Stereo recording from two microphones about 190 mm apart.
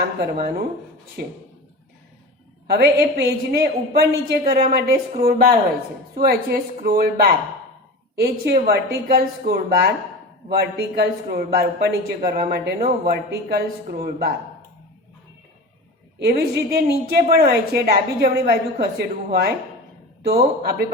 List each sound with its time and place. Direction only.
1.2 s a woman's voice: 50° right (ahead or behind)
2.6 s a woman's voice: 55° right (ahead or behind)
16.1 s a woman's voice: 55° right (ahead or behind)